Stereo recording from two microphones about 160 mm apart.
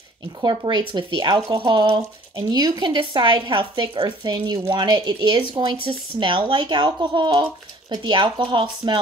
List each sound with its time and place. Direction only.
0.4 s speech: 25° right (ahead or behind)